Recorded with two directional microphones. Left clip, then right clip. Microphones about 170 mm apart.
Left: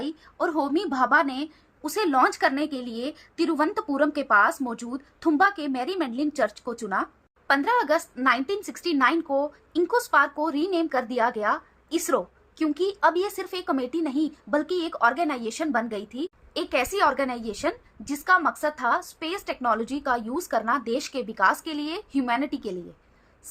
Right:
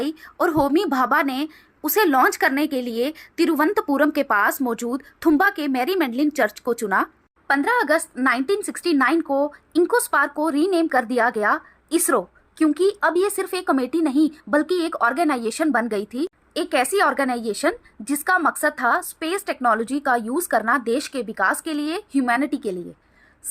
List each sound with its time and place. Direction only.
0.0 s a woman's voice: 25° right (ahead or behind)